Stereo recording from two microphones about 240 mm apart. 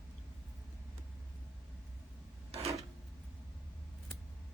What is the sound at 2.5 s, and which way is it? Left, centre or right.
Rub, right.